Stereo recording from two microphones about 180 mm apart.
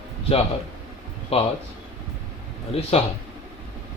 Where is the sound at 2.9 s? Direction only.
35° left (ahead or behind).